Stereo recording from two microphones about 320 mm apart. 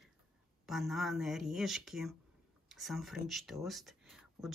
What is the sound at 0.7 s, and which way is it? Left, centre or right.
Speech, centre.